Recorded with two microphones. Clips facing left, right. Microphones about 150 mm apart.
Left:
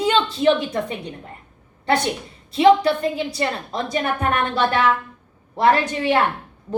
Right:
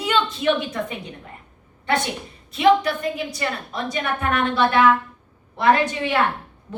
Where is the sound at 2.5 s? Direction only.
30° left (ahead or behind).